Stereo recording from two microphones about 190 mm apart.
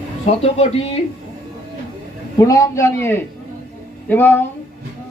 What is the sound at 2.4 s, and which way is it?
Speech, 20° left (ahead or behind).